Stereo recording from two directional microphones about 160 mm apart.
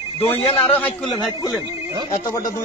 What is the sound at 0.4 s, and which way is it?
Speech, 40° left (ahead or behind).